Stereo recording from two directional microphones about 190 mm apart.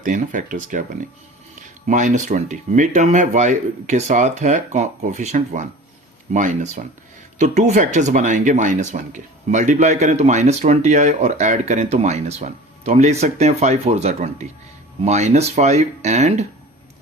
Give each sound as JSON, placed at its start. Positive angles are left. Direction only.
{"t": 0.0, "sound": "speech", "side_deg": -45}
{"t": 1.9, "sound": "speech", "side_deg": -40}